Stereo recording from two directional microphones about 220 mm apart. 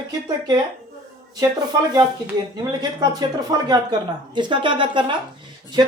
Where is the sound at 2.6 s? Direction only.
15° right (ahead or behind).